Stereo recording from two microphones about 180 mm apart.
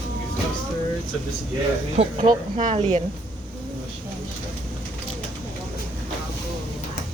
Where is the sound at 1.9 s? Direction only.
30° right (ahead or behind).